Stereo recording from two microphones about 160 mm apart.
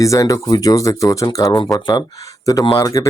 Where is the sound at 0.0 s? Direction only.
20° left (ahead or behind).